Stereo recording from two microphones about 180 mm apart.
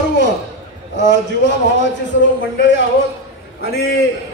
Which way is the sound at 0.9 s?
80° left.